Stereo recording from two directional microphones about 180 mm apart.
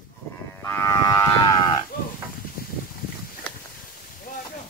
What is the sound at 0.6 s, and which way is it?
Moo, 15° left (ahead or behind).